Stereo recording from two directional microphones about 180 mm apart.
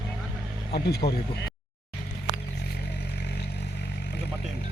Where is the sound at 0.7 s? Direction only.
65° left (ahead or behind).